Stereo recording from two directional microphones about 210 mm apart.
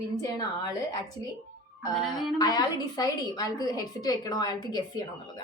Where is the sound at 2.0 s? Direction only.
Centre (ahead or behind).